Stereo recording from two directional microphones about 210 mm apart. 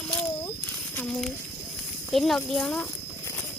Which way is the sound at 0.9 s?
5° left (ahead or behind).